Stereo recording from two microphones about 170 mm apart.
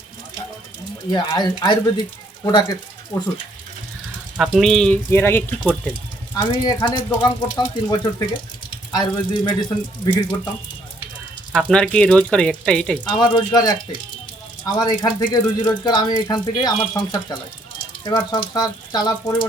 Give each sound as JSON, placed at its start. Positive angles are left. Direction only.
{"t": 1.1, "sound": "speech", "side_deg": 25}
{"t": 4.4, "sound": "speech", "side_deg": 0}
{"t": 6.3, "sound": "speech", "side_deg": 25}
{"t": 11.5, "sound": "speech", "side_deg": 5}
{"t": 13.1, "sound": "speech", "side_deg": 25}
{"t": 14.8, "sound": "speech", "side_deg": 25}